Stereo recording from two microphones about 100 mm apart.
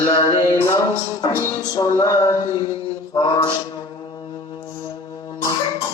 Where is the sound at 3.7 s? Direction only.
45° left (ahead or behind).